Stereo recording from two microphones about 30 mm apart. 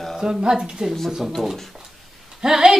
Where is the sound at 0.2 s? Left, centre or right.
Right.